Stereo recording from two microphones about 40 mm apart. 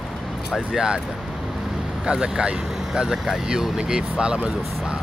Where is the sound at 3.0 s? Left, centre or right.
Centre.